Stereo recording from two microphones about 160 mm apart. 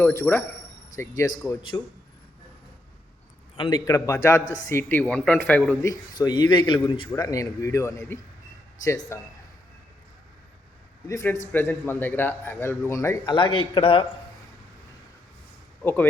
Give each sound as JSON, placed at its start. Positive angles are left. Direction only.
{"t": 0.0, "sound": "speech", "side_deg": 15}
{"t": 3.6, "sound": "speech", "side_deg": 25}
{"t": 5.9, "sound": "speech", "side_deg": 25}
{"t": 7.1, "sound": "speech", "side_deg": 20}
{"t": 11.1, "sound": "speech", "side_deg": 15}
{"t": 13.2, "sound": "a man's voice", "side_deg": 30}
{"t": 15.8, "sound": "speech", "side_deg": 10}